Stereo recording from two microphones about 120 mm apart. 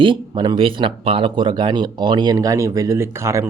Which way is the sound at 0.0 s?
40° right (ahead or behind).